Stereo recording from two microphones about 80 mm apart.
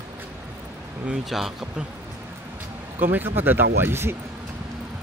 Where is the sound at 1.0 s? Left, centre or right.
Centre.